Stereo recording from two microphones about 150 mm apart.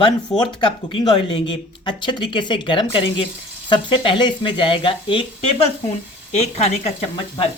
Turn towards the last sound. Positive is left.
turn(degrees=45)  # may be behind; listen again after turning